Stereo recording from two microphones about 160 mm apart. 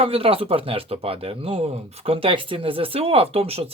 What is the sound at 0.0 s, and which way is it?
Speech, 35° right (ahead or behind).